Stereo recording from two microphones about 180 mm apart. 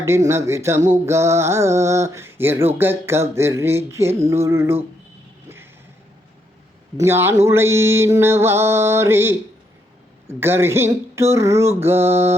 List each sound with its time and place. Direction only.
0.3 s mantra: 15° right (ahead or behind)
6.9 s mantra: 15° right (ahead or behind)